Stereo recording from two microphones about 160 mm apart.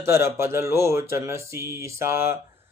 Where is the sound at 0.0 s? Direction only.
15° right (ahead or behind).